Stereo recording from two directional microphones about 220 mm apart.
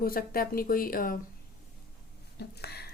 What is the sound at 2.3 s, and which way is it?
Speech, 45° left (ahead or behind).